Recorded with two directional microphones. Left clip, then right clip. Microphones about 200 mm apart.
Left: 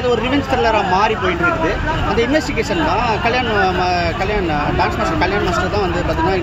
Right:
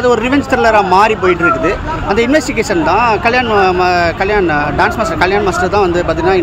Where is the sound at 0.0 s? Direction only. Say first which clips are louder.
Right 5 dB; 55° right (ahead or behind).